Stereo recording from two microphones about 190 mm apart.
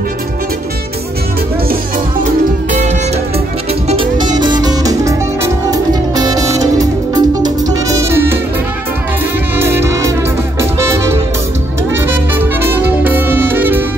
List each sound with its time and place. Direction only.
4.4 s music: 25° right (ahead or behind)
9.6 s music: 15° right (ahead or behind)
11.9 s music: 10° right (ahead or behind)